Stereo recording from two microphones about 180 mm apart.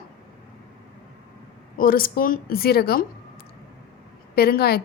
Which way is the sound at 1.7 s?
55° left (ahead or behind).